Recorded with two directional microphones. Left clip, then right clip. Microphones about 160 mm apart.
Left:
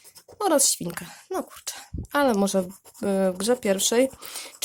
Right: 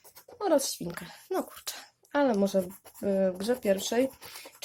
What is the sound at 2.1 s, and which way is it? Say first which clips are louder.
Speech: left 4 dB; 35° left (ahead or behind).